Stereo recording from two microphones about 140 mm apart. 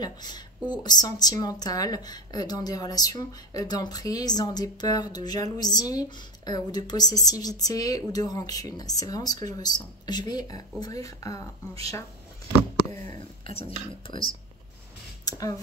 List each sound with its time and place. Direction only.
0.0 s a woman's voice: 30° left (ahead or behind)
13.5 s speech: 45° left (ahead or behind)
15.2 s speech: 25° left (ahead or behind)